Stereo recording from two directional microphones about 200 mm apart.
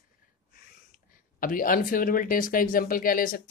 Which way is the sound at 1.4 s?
45° left (ahead or behind).